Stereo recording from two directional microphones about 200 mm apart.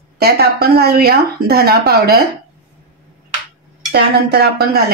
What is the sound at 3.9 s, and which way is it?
A woman's voice, 50° right (ahead or behind).